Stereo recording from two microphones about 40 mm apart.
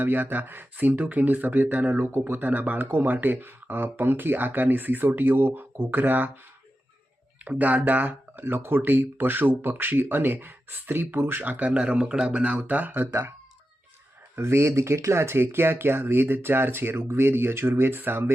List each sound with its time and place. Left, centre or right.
0.0 s speech: right
2.1 s speech: right
2.5 s speech: right
7.4 s speech: right
11.2 s speech: right
11.6 s speech: right
12.5 s speech: right
12.9 s speech: right
14.3 s speech: right